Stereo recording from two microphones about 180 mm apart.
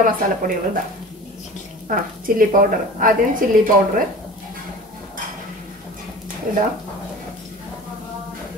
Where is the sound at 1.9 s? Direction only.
50° right (ahead or behind).